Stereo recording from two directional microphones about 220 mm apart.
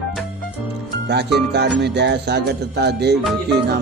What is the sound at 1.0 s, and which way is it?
Speech, 50° right (ahead or behind).